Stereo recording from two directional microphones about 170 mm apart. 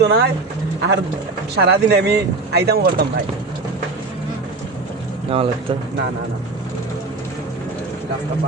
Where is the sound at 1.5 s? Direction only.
75° right (ahead or behind).